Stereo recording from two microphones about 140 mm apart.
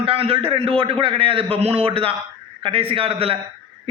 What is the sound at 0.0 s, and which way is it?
A man's voice, 45° right (ahead or behind).